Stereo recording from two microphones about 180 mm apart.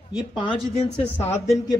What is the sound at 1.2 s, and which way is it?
Speech, 35° left (ahead or behind).